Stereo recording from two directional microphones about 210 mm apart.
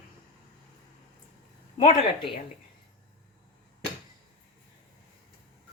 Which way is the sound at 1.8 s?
35° left (ahead or behind).